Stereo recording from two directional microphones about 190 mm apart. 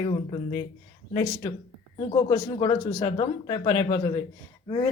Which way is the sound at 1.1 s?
20° left (ahead or behind).